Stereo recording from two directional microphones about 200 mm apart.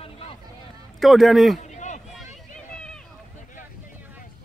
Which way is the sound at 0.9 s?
Centre (ahead or behind).